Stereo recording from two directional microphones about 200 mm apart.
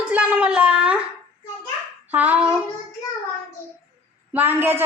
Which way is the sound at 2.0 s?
10° right (ahead or behind).